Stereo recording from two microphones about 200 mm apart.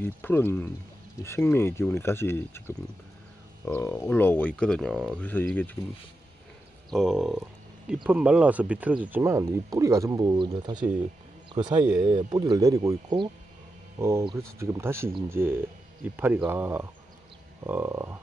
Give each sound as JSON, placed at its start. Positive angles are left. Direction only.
{"t": 0.0, "sound": "speech", "side_deg": 10}
{"t": 6.9, "sound": "speech", "side_deg": 0}